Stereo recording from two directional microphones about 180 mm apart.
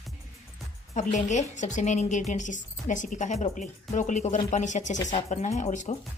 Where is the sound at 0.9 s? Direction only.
40° left (ahead or behind).